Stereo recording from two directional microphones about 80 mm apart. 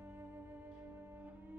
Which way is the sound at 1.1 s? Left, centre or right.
Right.